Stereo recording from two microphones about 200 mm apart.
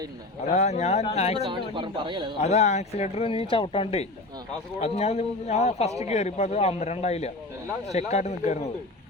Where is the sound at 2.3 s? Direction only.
35° left (ahead or behind).